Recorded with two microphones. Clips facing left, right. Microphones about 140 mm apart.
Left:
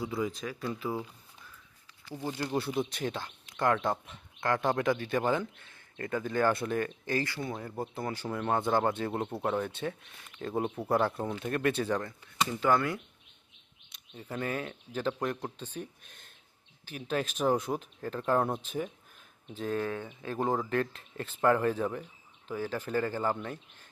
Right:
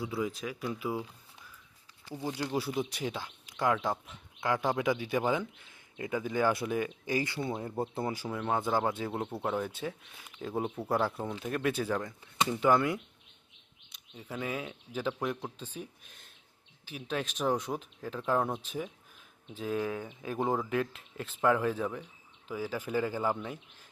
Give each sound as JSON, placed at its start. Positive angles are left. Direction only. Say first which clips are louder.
{"t": 0.0, "sound": "speech", "louder": "left 1 dB", "side_deg": -5}
{"t": 8.1, "sound": "speech", "louder": "left 1 dB", "side_deg": -5}
{"t": 12.2, "sound": "speech", "louder": "right 2 dB", "side_deg": -20}
{"t": 13.9, "sound": "speech", "louder": "left 2 dB", "side_deg": 0}